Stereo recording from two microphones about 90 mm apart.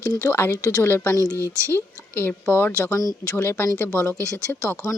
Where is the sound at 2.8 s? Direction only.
40° left (ahead or behind).